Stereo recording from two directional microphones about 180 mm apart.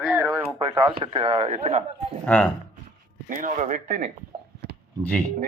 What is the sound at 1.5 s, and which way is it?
Speech, 40° right (ahead or behind).